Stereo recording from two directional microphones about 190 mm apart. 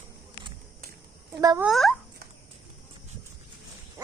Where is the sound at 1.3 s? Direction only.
20° right (ahead or behind).